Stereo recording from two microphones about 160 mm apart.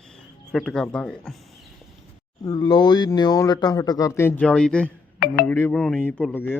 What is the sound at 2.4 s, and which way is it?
Speech, 25° left (ahead or behind).